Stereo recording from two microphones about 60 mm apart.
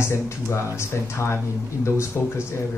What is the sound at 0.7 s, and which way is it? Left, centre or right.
Speech, left.